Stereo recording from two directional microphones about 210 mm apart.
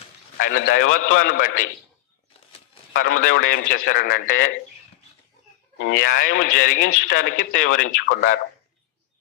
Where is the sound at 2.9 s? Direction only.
40° left (ahead or behind).